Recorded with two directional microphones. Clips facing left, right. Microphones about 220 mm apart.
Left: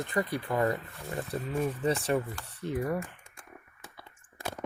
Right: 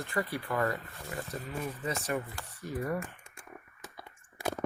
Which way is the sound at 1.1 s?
30° left (ahead or behind).